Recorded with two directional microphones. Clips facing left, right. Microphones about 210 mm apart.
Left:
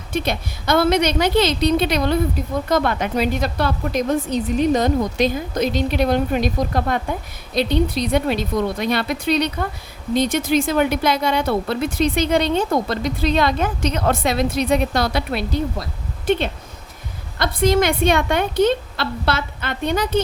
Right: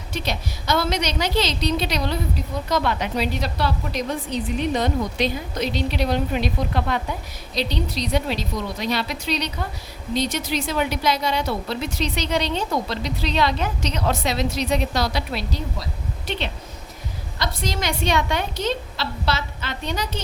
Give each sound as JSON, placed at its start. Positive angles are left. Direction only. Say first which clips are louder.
{"t": 0.1, "sound": "a woman's voice", "louder": "left 5 dB", "side_deg": 55}